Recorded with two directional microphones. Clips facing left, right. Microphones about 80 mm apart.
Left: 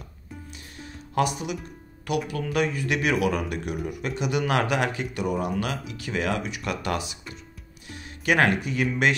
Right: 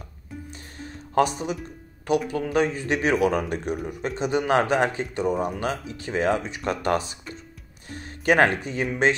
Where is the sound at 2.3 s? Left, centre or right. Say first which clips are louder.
Right 3 dB; right.